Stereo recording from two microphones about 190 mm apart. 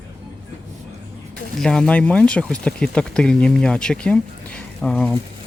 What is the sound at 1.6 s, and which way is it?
Speech, 5° left (ahead or behind).